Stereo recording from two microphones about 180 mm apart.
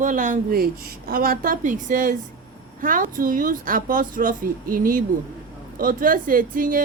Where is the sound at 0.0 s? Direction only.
45° right (ahead or behind).